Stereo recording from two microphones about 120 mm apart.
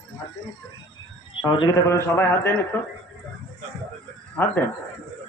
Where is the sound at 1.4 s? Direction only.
40° left (ahead or behind); by 2.8 s 20° left (ahead or behind).